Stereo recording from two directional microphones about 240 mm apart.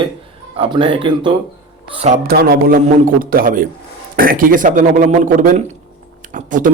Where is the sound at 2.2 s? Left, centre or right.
Right.